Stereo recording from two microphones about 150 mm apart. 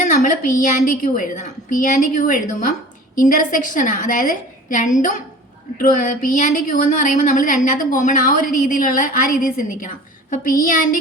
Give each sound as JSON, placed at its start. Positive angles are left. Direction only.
{"t": 0.0, "sound": "speech", "side_deg": 60}